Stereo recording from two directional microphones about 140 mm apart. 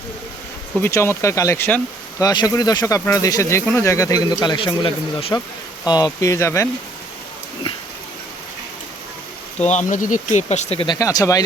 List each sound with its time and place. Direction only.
0.8 s speech: 20° left (ahead or behind)
2.2 s speech: 30° left (ahead or behind)
5.8 s speech: 25° left (ahead or behind)
9.6 s speech: 60° left (ahead or behind)
10.9 s speech: 25° left (ahead or behind)